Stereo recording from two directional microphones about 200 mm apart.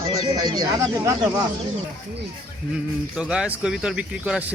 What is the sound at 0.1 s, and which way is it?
Speech, 20° right (ahead or behind).